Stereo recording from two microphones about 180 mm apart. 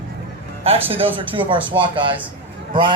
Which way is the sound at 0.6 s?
30° right (ahead or behind).